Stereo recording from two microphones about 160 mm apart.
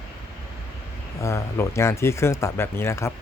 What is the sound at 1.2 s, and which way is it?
Speech, 15° left (ahead or behind).